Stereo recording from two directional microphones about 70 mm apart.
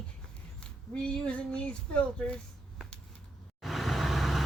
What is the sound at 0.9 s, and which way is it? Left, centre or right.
Speech, centre.